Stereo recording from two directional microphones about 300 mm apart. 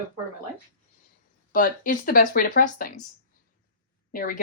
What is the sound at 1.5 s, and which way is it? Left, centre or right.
Speech, left.